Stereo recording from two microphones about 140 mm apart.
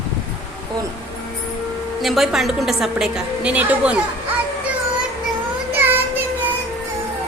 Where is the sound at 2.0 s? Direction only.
Centre (ahead or behind).